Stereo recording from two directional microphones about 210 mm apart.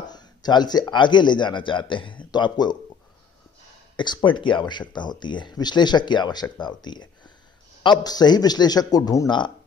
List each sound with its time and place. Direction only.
0.0 s speech: 20° left (ahead or behind)
3.9 s speech: 20° left (ahead or behind)